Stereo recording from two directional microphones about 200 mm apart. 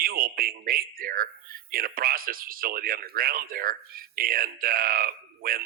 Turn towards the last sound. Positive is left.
turn(degrees=-45)  # may be behind; listen again after turning